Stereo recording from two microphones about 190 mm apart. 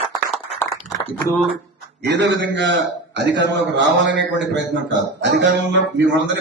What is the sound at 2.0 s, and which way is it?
A man's voice, 65° right (ahead or behind).